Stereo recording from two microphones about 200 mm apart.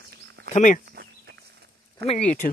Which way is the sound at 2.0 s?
55° right (ahead or behind).